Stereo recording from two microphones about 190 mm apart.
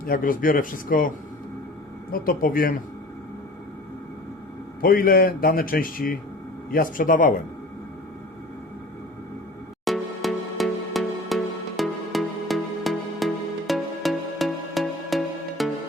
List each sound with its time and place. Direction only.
0.0 s a man's voice: 50° left (ahead or behind)
2.1 s a man's voice: 50° left (ahead or behind)
4.8 s a man's voice: 50° left (ahead or behind)
9.8 s music: centre (ahead or behind)